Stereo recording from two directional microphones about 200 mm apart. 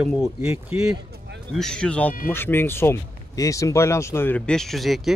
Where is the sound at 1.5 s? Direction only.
5° left (ahead or behind).